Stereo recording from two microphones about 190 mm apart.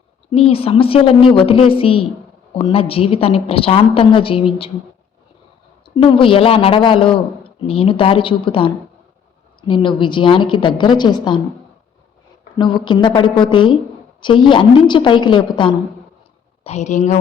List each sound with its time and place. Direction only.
0.3 s a woman's voice: 30° left (ahead or behind)
5.8 s a woman's voice: 25° left (ahead or behind)
12.5 s a woman's voice: 25° left (ahead or behind)
16.6 s speech: 35° left (ahead or behind)